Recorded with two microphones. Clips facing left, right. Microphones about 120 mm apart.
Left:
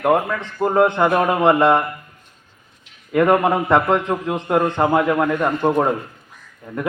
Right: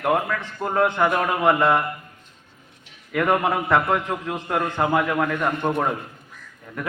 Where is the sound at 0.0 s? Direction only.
20° left (ahead or behind).